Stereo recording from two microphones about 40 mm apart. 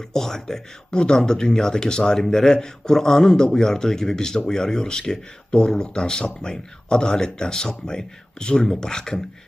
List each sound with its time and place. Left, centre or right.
0.1 s speech: centre